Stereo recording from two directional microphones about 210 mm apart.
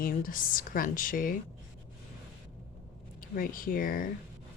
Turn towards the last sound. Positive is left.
turn(degrees=40)  # may be behind; listen again after turning